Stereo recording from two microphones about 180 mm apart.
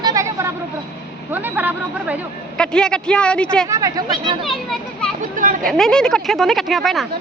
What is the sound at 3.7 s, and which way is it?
Speech, 20° right (ahead or behind).